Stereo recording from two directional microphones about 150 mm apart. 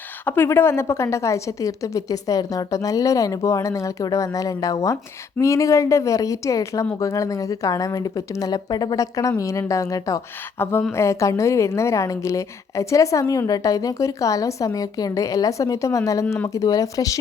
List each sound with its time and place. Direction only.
0.3 s a woman's voice: 15° left (ahead or behind)